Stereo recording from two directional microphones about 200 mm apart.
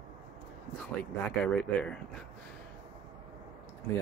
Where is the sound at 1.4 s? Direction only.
5° left (ahead or behind).